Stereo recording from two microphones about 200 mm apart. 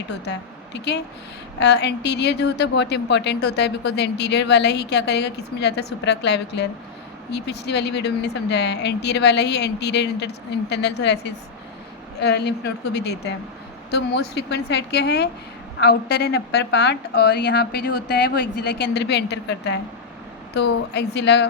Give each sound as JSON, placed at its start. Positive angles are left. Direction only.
{"t": 0.1, "sound": "a woman's voice", "side_deg": 60}